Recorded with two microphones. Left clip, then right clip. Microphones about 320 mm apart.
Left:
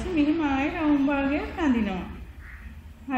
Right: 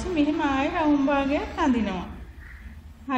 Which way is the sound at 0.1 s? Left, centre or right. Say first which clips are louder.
Even; right.